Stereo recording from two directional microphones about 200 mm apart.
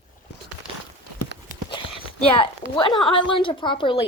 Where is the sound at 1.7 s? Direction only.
25° left (ahead or behind).